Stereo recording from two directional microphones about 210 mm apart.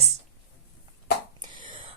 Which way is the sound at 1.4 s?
25° right (ahead or behind).